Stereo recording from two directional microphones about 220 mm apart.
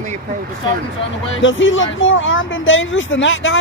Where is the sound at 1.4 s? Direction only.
55° left (ahead or behind).